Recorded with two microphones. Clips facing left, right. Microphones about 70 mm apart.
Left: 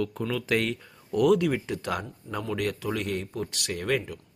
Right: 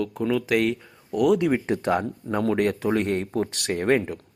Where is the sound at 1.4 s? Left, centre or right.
Right.